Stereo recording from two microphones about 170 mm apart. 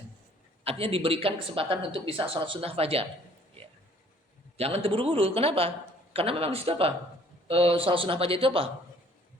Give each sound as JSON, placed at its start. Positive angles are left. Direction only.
{"t": 0.6, "sound": "speech", "side_deg": -35}
{"t": 4.5, "sound": "speech", "side_deg": -35}